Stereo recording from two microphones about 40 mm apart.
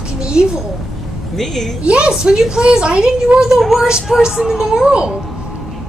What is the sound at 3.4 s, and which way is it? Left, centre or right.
A woman's voice, centre.